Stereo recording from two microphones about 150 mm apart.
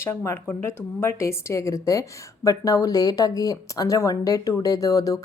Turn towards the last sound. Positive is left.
turn(degrees=25)  # may be behind; listen again after turning